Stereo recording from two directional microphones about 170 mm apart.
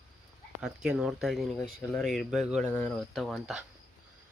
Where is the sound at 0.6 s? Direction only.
5° right (ahead or behind).